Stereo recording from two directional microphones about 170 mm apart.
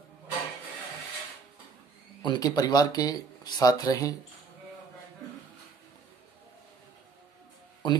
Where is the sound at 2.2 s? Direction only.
25° left (ahead or behind).